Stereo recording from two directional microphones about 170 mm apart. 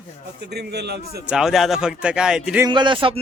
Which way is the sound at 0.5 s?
75° right (ahead or behind).